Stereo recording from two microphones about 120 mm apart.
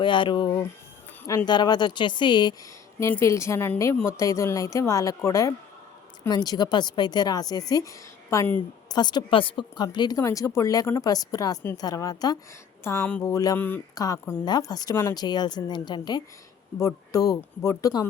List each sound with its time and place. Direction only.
0.0 s speech: 40° left (ahead or behind)
3.0 s a woman's voice: 20° left (ahead or behind)
13.6 s speech: 15° left (ahead or behind)
13.9 s speech: 30° left (ahead or behind)
16.7 s a woman's voice: 25° left (ahead or behind)